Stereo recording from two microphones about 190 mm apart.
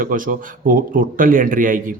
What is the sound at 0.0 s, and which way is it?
A man's voice, 45° right (ahead or behind).